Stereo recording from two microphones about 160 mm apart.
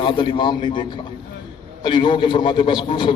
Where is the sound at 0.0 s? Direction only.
30° left (ahead or behind).